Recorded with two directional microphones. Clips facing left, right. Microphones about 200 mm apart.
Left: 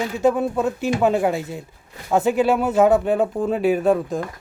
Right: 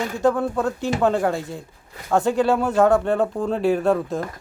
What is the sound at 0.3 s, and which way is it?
Speech, 20° left (ahead or behind).